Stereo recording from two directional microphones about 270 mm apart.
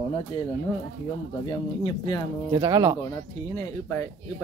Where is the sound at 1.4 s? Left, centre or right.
Centre.